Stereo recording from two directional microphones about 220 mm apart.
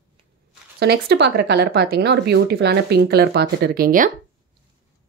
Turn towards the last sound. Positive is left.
turn(degrees=-40)  # may be behind; listen again after turning